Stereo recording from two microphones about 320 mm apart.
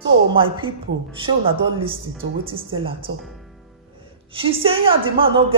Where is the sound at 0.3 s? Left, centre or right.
Centre.